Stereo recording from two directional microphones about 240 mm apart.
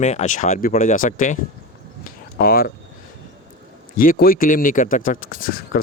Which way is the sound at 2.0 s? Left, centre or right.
Left.